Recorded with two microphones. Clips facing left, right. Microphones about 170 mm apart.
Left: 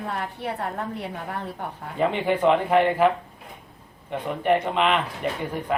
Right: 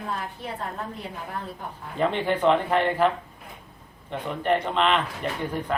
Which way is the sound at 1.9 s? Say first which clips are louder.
Left 1 dB; 10° left (ahead or behind).